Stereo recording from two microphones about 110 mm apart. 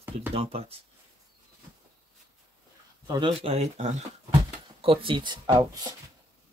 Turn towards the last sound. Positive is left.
turn(degrees=-35)  # may be behind; listen again after turning